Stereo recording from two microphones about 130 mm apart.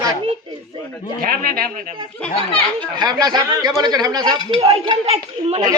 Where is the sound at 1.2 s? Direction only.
90° right.